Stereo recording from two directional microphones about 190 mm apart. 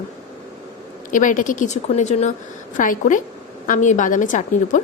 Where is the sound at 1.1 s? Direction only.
45° left (ahead or behind).